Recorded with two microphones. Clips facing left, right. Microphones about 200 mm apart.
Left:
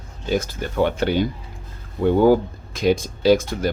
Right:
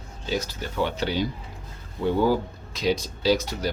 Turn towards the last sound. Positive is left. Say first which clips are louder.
# left 6 dB
turn(degrees=50)  # may be behind; listen again after turning